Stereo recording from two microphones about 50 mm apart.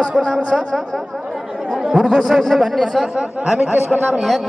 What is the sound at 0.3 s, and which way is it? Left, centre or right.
Speech, centre.